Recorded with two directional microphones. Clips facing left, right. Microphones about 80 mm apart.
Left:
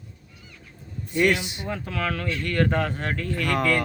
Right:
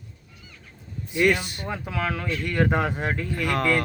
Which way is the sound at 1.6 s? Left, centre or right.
Centre.